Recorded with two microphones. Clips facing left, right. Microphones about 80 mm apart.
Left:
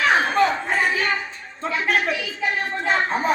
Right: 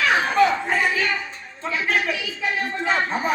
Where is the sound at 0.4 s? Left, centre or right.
Left.